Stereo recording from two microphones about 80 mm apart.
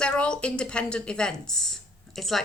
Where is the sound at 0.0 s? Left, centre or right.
Centre.